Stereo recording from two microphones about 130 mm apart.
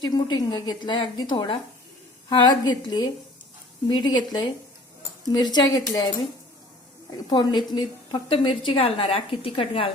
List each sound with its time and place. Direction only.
0.0 s a woman's voice: 35° left (ahead or behind)
7.3 s a woman's voice: 35° left (ahead or behind)